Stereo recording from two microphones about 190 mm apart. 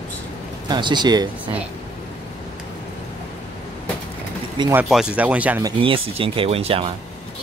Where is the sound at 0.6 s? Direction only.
25° right (ahead or behind).